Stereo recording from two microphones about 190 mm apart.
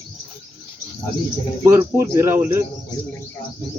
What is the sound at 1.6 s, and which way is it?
Speech, 10° right (ahead or behind).